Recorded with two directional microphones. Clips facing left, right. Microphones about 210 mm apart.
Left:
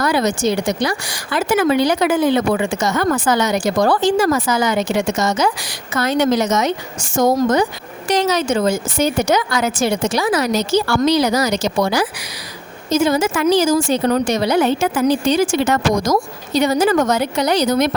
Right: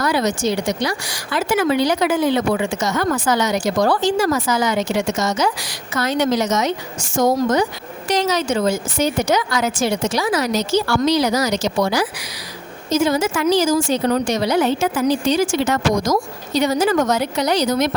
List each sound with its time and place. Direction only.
0.0 s a woman's voice: 55° left (ahead or behind)